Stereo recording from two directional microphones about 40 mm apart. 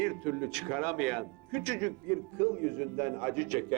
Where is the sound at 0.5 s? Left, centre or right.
Left.